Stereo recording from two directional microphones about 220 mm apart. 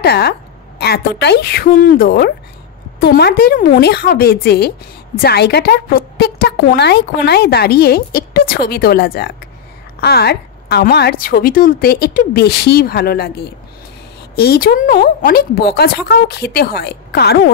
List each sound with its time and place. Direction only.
0.0 s a woman's voice: 45° left (ahead or behind)